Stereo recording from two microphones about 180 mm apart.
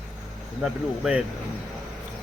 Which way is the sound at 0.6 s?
Centre (ahead or behind).